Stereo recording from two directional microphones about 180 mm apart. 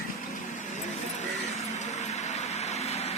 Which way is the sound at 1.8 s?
40° left (ahead or behind).